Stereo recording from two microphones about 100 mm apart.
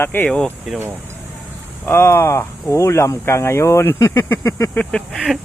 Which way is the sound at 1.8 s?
25° left (ahead or behind).